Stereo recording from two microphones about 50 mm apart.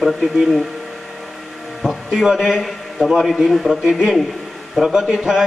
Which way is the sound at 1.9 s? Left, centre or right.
Centre.